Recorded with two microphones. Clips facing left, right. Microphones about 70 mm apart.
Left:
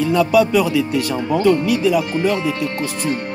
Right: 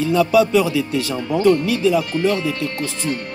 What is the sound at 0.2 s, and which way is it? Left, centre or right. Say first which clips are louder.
Speech: even; right.